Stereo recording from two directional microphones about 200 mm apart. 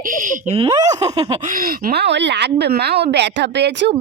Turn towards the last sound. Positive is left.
turn(degrees=-60)  # may be behind; listen again after turning